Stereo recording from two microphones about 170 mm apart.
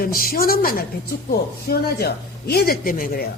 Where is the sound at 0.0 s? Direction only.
60° left (ahead or behind).